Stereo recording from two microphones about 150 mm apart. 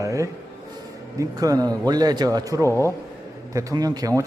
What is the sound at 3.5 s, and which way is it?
Speech, 25° right (ahead or behind).